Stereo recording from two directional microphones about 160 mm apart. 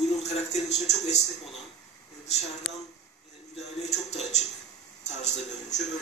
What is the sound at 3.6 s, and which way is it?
Speech, 45° left (ahead or behind).